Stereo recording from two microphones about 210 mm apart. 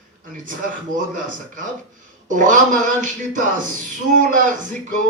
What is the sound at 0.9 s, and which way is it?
Speech, 40° right (ahead or behind).